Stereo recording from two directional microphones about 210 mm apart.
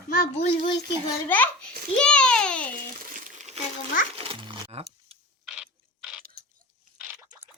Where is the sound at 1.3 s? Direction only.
5° left (ahead or behind).